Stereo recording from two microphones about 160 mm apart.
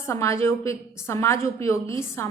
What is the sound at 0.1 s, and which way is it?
A woman's voice, 20° left (ahead or behind).